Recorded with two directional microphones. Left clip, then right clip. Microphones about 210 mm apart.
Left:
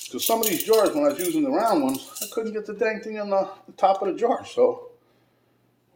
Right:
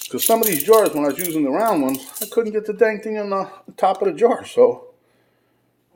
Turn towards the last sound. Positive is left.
turn(degrees=-45)  # may be behind; listen again after turning